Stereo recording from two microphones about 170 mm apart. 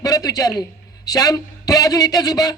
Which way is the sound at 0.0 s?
20° left (ahead or behind).